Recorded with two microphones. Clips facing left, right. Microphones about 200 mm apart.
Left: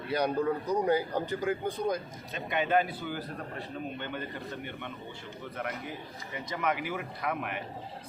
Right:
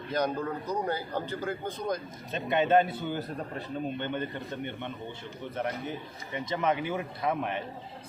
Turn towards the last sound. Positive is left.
turn(degrees=-25)  # may be behind; listen again after turning